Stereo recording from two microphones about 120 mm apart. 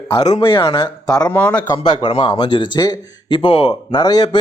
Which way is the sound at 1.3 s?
15° left (ahead or behind).